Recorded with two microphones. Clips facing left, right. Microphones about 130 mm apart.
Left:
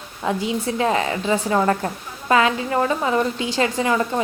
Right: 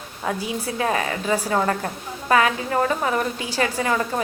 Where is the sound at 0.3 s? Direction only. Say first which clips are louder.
Left 4 dB; 25° left (ahead or behind).